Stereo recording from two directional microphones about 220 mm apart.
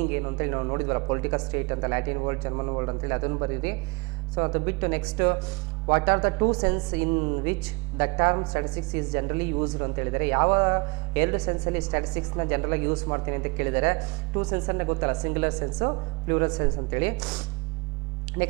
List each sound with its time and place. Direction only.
0.0 s speech: 15° right (ahead or behind)